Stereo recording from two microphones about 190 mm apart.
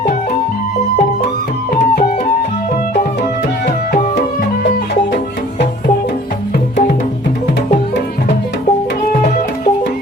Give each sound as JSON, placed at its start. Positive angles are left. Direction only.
{"t": 9.2, "sound": "music", "side_deg": 50}